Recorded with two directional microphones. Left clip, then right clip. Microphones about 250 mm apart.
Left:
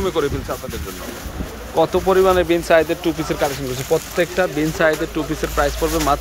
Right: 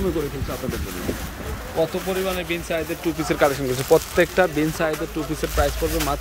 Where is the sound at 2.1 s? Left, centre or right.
Centre.